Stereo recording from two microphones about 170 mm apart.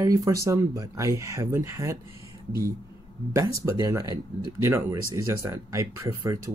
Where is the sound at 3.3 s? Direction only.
20° right (ahead or behind).